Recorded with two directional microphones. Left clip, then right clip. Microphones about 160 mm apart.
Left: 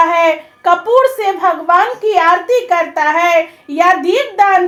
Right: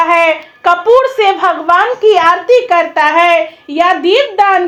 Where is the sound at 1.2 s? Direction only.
15° right (ahead or behind).